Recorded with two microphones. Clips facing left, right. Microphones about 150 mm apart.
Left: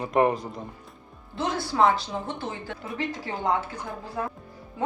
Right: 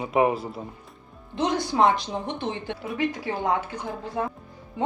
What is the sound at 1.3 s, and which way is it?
A woman's voice, 20° right (ahead or behind).